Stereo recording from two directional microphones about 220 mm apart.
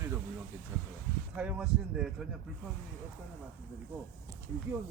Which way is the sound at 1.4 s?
5° right (ahead or behind).